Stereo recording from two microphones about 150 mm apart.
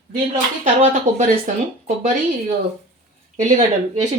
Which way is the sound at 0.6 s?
55° right (ahead or behind).